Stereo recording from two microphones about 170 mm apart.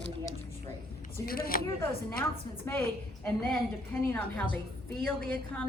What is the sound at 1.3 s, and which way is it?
Speech, 60° left (ahead or behind).